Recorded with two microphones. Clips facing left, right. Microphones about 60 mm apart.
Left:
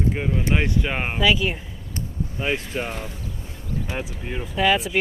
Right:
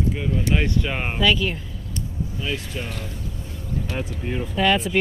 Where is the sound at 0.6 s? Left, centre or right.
Centre.